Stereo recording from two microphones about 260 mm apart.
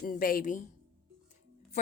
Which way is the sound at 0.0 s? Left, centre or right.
Left.